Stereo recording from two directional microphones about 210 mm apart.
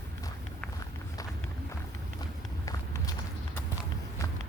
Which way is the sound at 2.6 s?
15° left (ahead or behind).